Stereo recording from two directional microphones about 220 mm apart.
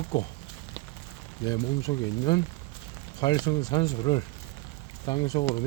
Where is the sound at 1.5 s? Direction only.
20° left (ahead or behind).